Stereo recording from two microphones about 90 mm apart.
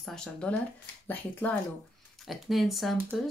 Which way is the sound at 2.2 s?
Centre (ahead or behind).